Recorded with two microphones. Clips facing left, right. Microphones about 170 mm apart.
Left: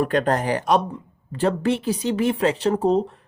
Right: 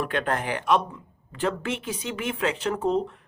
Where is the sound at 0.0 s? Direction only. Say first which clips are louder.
Left 6 dB; 40° left (ahead or behind).